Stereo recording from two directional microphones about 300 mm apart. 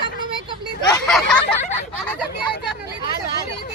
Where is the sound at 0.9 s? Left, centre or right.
Centre.